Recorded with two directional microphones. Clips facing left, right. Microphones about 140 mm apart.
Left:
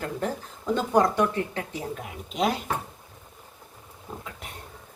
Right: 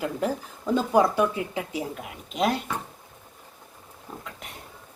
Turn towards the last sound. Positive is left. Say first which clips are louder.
# left 1 dB
turn(degrees=0)  # may be behind; listen again after turning